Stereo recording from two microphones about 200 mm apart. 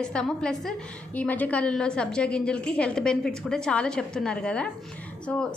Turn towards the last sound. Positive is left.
turn(degrees=5)  # may be behind; listen again after turning